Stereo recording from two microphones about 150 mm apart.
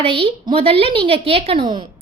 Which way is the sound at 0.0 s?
40° right (ahead or behind).